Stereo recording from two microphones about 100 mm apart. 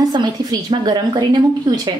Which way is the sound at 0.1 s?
45° right (ahead or behind).